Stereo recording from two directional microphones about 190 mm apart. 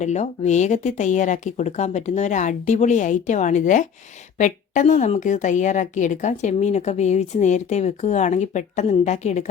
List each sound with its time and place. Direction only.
0.0 s a woman's voice: 40° left (ahead or behind)